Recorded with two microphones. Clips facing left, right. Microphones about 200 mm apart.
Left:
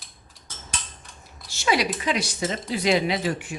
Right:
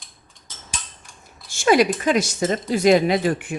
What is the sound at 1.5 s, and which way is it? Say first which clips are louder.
Speech: right 7 dB; 50° right (ahead or behind).